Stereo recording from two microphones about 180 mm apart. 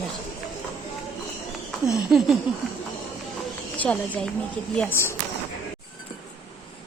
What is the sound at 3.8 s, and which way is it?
A woman's voice, 5° left (ahead or behind).